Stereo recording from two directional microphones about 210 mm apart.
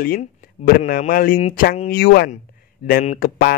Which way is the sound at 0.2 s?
35° left (ahead or behind).